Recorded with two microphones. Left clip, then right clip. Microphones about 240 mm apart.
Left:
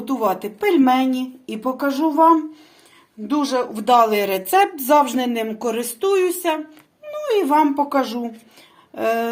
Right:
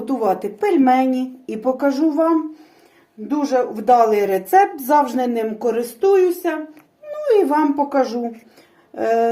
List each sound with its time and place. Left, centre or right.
0.0 s speech: centre
9.0 s speech: centre